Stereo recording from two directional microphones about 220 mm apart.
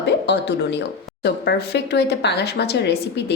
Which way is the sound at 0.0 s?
50° left (ahead or behind).